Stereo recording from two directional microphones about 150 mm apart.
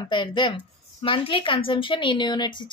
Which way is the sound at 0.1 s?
30° left (ahead or behind).